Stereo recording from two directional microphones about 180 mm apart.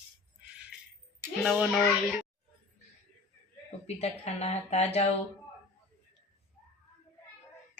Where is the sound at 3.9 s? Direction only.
35° left (ahead or behind).